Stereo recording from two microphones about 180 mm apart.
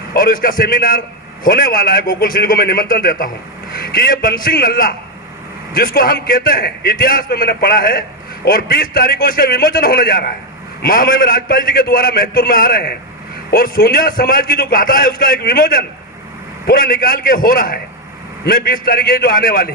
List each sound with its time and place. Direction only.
0.1 s a man's voice: 55° left (ahead or behind)